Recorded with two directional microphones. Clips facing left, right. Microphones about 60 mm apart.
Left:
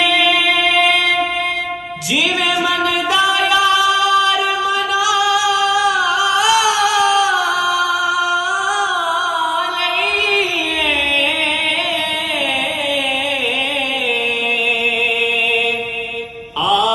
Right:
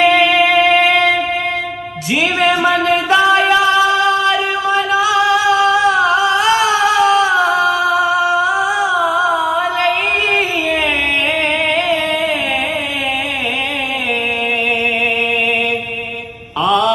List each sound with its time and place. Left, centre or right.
0.0 s music: right
2.1 s music: right